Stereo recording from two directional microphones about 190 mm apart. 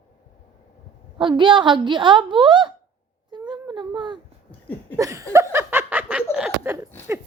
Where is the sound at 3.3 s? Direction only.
25° right (ahead or behind).